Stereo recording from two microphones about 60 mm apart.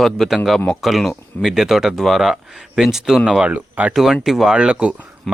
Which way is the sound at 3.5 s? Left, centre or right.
Right.